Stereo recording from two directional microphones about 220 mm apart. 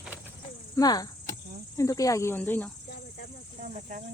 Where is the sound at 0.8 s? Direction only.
15° left (ahead or behind).